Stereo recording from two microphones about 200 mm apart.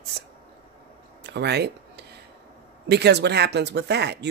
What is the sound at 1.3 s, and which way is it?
Speech, 55° right (ahead or behind).